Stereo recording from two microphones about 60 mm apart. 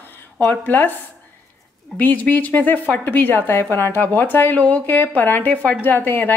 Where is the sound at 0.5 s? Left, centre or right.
Left.